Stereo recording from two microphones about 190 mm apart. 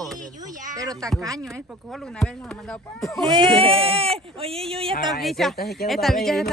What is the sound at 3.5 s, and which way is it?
Speech, 30° right (ahead or behind).